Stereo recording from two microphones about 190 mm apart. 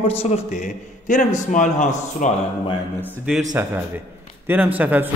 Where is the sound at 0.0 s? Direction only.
35° left (ahead or behind).